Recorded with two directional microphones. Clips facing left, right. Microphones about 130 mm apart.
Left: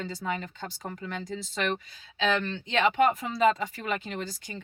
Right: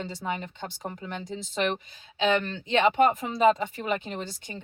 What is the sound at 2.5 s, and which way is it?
Speech, 30° right (ahead or behind).